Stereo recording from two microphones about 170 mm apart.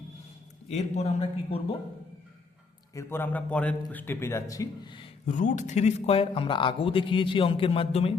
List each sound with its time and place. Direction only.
0.7 s speech: 40° left (ahead or behind)
2.9 s a man's voice: 15° left (ahead or behind)
5.2 s speech: 50° left (ahead or behind)